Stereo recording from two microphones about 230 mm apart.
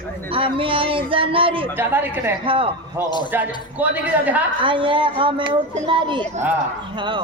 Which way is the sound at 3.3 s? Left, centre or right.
Centre.